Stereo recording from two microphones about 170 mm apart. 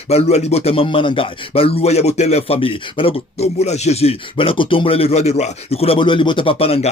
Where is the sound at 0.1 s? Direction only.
40° left (ahead or behind).